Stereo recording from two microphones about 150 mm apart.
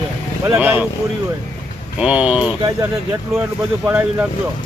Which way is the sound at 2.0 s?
10° right (ahead or behind).